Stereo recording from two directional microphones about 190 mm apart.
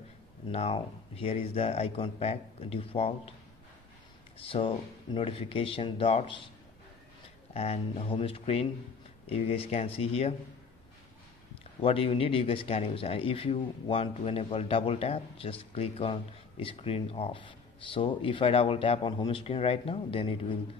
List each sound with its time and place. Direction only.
0.5 s speech: 30° left (ahead or behind)
4.4 s speech: 30° left (ahead or behind)
7.5 s speech: 30° left (ahead or behind)
11.8 s speech: 30° left (ahead or behind)